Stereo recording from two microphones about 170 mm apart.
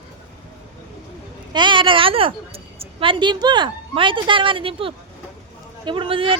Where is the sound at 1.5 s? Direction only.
30° right (ahead or behind).